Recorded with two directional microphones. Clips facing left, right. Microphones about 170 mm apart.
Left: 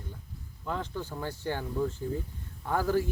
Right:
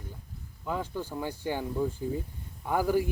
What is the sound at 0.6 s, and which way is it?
Speech, 10° right (ahead or behind).